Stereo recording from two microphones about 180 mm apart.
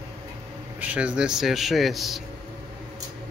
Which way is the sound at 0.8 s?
5° right (ahead or behind).